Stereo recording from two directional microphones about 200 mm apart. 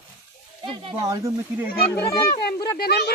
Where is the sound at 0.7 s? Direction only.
20° right (ahead or behind).